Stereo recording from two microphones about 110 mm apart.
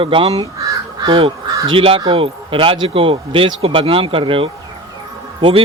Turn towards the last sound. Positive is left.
turn(degrees=-55)  # may be behind; listen again after turning